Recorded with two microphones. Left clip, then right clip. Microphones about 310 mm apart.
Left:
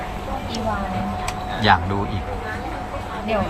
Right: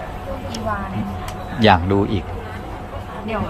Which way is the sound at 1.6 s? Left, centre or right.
Right.